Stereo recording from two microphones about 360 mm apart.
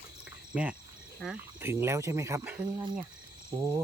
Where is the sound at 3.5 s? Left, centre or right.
Centre.